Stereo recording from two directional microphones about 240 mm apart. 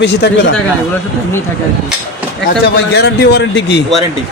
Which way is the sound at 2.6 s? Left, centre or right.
Left.